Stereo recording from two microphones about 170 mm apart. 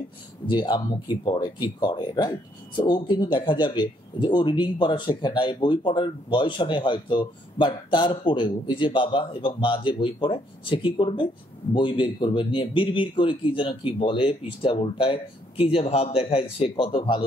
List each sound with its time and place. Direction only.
0.5 s a man's voice: 25° left (ahead or behind)